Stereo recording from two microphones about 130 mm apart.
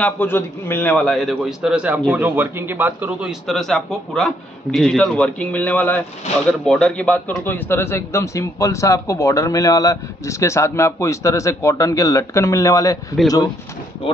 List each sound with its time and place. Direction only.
0.0 s a man's voice: 15° left (ahead or behind)
0.9 s a man's voice: centre (ahead or behind); by 13.0 s 25° left (ahead or behind)
14.0 s speech: 45° left (ahead or behind)